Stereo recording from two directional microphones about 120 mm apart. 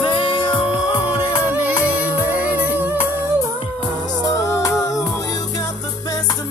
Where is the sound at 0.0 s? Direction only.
45° left (ahead or behind).